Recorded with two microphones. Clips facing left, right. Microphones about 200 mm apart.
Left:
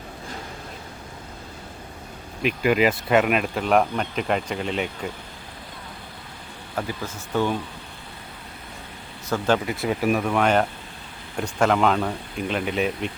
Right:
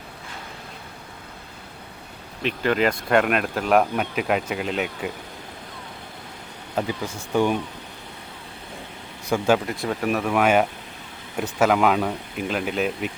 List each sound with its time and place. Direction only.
2.4 s speech: 5° left (ahead or behind)
6.7 s speech: 15° right (ahead or behind)
9.3 s speech: 15° right (ahead or behind)
9.6 s speech: 5° left (ahead or behind)